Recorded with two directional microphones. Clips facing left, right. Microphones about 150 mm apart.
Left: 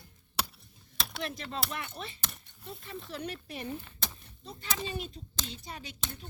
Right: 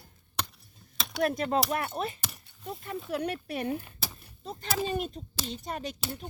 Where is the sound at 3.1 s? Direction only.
60° right (ahead or behind).